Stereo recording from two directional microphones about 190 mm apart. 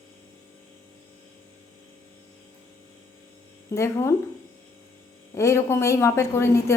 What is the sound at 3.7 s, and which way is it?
Speech, 15° left (ahead or behind).